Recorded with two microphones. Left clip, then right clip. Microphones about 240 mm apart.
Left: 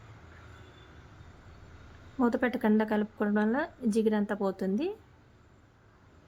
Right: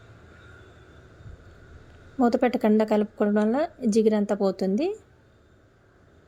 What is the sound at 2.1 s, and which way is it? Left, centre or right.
A woman's voice, centre.